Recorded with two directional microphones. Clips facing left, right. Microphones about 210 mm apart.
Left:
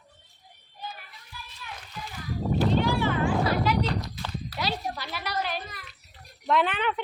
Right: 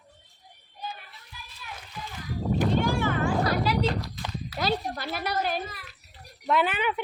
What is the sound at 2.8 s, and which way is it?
Vehicle, 50° right (ahead or behind).